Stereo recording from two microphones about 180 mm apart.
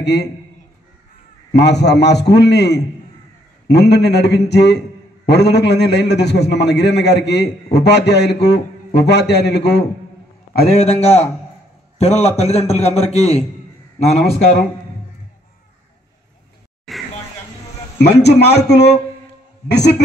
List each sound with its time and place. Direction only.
0.0 s a man's voice: 70° left (ahead or behind)
1.5 s a man's voice: 70° left (ahead or behind)
10.7 s a man's voice: 35° left (ahead or behind)
16.9 s a sound: centre (ahead or behind)
17.9 s a man's voice: 70° left (ahead or behind)